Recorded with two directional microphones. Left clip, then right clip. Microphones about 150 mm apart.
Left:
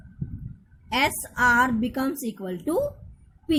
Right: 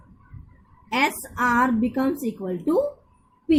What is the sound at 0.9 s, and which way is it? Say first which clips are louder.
A woman's voice: right 1 dB; 45° left (ahead or behind).